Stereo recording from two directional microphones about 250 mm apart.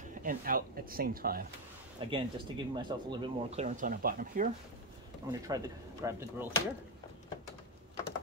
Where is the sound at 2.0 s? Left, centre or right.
Right.